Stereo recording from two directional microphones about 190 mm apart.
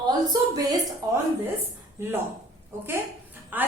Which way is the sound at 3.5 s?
10° right (ahead or behind).